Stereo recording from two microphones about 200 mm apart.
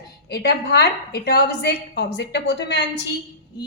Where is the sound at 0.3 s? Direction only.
55° left (ahead or behind).